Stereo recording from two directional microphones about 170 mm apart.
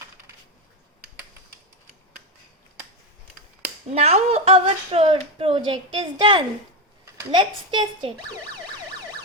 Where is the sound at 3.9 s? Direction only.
40° right (ahead or behind).